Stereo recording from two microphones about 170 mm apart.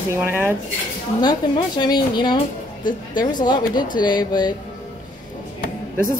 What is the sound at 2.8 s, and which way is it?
Speech, 50° left (ahead or behind).